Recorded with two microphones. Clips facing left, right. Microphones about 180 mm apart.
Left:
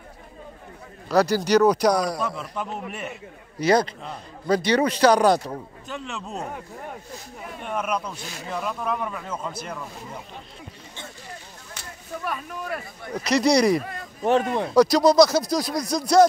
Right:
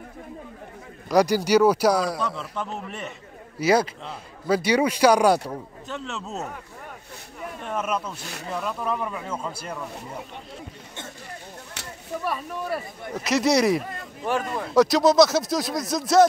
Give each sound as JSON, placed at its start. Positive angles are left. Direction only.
{"t": 1.0, "sound": "a man's voice", "side_deg": -10}
{"t": 2.3, "sound": "a man's voice", "side_deg": 5}
{"t": 3.5, "sound": "a man's voice", "side_deg": -5}
{"t": 7.6, "sound": "a man's voice", "side_deg": 10}
{"t": 7.9, "sound": "speech", "side_deg": -5}
{"t": 12.7, "sound": "speech", "side_deg": -5}
{"t": 14.2, "sound": "speech", "side_deg": 25}
{"t": 14.7, "sound": "speech", "side_deg": 0}